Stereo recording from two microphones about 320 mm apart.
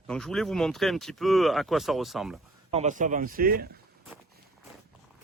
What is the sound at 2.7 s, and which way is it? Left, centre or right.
Speech, right.